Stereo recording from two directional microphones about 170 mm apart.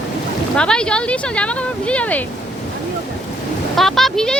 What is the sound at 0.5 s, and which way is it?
Speech, 5° left (ahead or behind).